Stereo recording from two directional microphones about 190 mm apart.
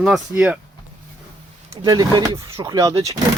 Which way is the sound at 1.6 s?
20° right (ahead or behind).